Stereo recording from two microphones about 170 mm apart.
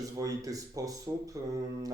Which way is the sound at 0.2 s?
20° right (ahead or behind).